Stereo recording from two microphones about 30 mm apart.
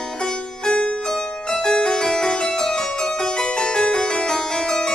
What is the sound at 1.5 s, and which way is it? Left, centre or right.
Music, left.